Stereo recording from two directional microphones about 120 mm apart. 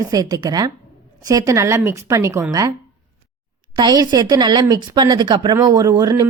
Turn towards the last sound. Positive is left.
turn(degrees=-30)  # may be behind; listen again after turning